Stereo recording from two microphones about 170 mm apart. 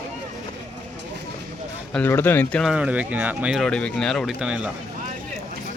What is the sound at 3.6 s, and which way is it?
Speech, 5° left (ahead or behind).